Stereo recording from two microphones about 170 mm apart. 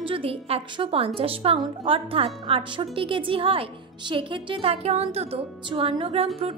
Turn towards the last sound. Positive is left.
turn(degrees=-35)  # may be behind; listen again after turning